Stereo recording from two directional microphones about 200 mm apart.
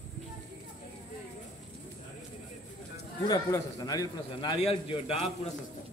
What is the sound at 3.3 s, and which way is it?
A man's voice, 20° left (ahead or behind).